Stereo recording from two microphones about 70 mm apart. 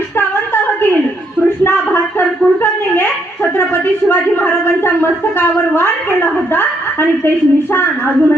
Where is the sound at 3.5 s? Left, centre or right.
Left.